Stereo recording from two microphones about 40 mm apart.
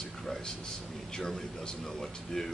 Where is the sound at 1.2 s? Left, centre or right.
Centre.